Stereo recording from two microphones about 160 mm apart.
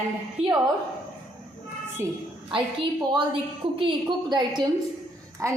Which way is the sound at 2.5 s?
30° right (ahead or behind).